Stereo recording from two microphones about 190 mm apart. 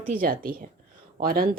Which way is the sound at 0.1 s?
50° right (ahead or behind).